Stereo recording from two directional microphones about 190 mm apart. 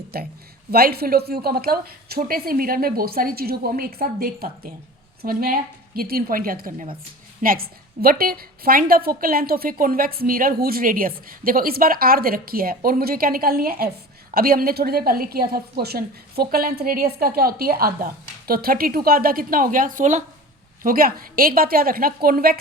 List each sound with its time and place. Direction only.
0.1 s a woman's voice: 55° right (ahead or behind)